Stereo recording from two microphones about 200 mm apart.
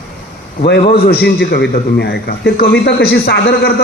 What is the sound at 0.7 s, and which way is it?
A man's voice, 50° left (ahead or behind).